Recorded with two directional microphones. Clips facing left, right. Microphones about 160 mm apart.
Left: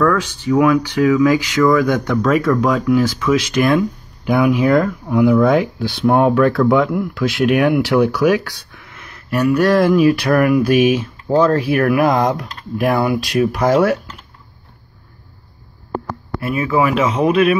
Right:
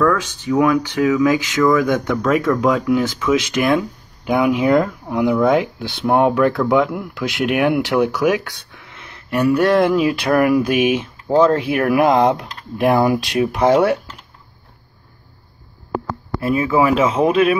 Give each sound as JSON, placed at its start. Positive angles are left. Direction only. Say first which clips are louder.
{"t": 0.0, "sound": "speech", "louder": "left 1 dB", "side_deg": -15}
{"t": 16.3, "sound": "speech", "louder": "right 1 dB", "side_deg": -25}